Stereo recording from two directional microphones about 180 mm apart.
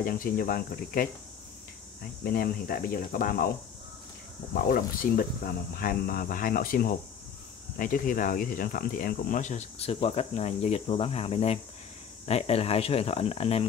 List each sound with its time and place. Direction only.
0.0 s speech: 50° left (ahead or behind)
2.2 s speech: 55° left (ahead or behind)
4.6 s speech: 50° left (ahead or behind); by 13.7 s 35° left (ahead or behind)